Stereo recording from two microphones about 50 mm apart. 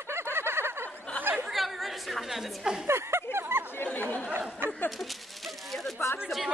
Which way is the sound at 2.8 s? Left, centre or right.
Right.